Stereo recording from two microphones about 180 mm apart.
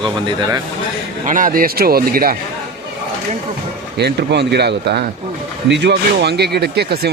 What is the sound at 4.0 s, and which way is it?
Speech, 70° right (ahead or behind).